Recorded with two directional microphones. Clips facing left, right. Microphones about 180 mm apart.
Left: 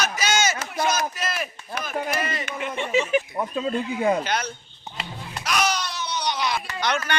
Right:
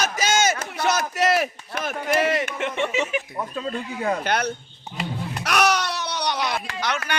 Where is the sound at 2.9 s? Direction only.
35° left (ahead or behind).